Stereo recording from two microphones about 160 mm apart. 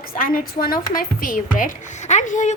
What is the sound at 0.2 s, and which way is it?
A woman's voice, 60° left (ahead or behind).